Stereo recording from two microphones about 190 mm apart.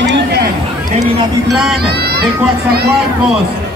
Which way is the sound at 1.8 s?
55° right (ahead or behind).